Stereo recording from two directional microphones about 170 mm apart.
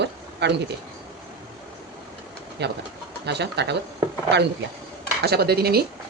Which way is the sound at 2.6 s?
85° right.